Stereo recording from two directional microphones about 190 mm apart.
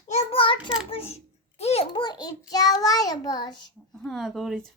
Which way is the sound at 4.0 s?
Centre (ahead or behind).